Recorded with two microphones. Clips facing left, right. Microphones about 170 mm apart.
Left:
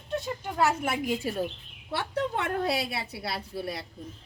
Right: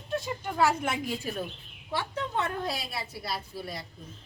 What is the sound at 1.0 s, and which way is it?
Speech, 25° left (ahead or behind).